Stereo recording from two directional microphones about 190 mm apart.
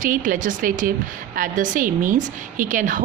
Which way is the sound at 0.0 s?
45° right (ahead or behind).